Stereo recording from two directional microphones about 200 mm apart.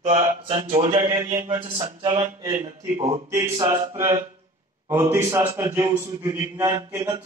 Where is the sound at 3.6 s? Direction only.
15° right (ahead or behind).